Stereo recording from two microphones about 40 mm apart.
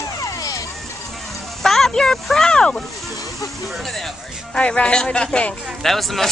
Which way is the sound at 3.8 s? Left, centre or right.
Centre.